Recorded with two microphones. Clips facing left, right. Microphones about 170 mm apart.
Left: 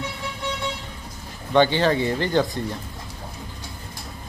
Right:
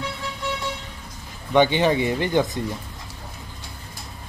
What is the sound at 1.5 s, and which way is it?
Speech, 15° right (ahead or behind).